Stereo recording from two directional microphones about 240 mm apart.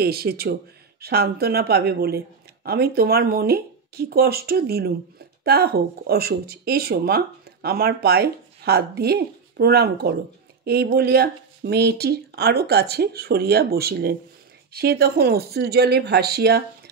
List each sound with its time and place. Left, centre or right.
0.0 s speech: right